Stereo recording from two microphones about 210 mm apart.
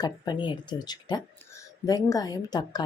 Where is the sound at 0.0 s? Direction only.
20° left (ahead or behind).